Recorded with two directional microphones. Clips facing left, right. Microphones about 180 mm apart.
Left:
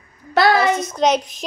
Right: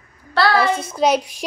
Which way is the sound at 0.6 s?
30° right (ahead or behind).